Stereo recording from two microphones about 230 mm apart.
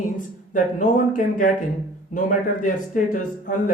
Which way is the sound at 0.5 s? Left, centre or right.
Left.